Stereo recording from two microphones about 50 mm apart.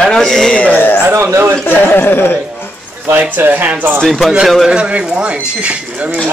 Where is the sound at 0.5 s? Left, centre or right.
Left.